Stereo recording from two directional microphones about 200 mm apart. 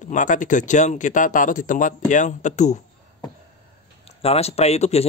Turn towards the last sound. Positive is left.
turn(degrees=30)  # may be behind; listen again after turning